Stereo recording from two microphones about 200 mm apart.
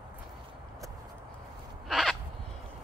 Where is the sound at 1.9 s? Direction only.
Centre (ahead or behind).